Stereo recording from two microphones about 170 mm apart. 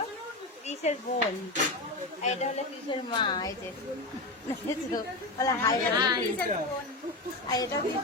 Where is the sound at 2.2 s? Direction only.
40° left (ahead or behind).